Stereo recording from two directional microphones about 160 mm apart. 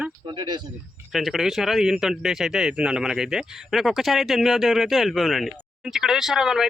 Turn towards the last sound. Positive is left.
turn(degrees=-5)  # may be behind; listen again after turning